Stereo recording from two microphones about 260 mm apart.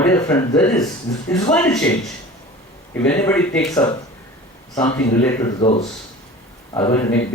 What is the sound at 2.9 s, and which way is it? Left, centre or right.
Speech, centre.